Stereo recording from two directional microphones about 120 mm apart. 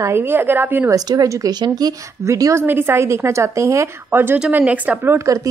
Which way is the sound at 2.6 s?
15° right (ahead or behind).